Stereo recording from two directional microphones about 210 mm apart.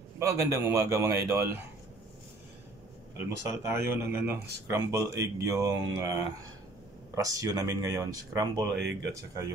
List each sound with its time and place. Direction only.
0.2 s speech: 15° right (ahead or behind)
3.6 s speech: 10° right (ahead or behind)
8.7 s speech: 55° right (ahead or behind)
9.1 s speech: 15° right (ahead or behind)